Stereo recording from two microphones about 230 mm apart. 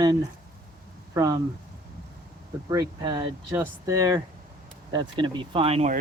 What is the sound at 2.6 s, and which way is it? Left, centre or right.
Speech, centre.